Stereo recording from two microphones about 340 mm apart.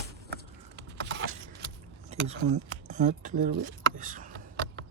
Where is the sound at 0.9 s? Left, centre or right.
Right.